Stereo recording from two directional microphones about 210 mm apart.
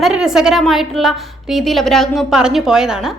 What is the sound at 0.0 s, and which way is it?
A child's voice, 5° right (ahead or behind).